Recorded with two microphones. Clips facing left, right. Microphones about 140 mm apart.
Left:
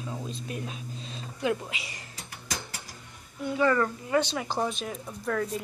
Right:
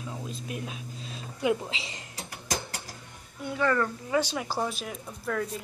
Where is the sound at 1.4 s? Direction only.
20° right (ahead or behind).